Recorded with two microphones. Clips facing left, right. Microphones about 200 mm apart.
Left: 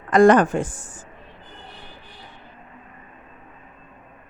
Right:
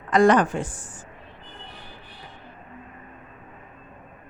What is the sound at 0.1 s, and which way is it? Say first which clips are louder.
Speech: left 4 dB; 50° left (ahead or behind).